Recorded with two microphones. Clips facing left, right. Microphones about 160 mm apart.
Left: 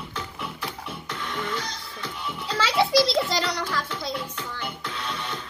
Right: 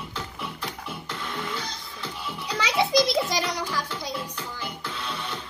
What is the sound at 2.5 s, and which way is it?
Music, 15° right (ahead or behind).